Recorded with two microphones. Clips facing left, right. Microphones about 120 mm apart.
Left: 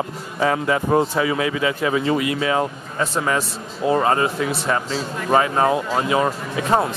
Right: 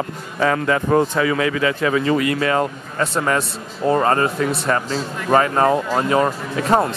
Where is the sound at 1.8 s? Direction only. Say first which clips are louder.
Right 2 dB; 15° left (ahead or behind).